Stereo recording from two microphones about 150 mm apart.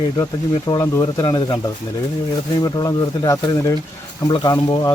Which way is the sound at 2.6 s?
25° left (ahead or behind).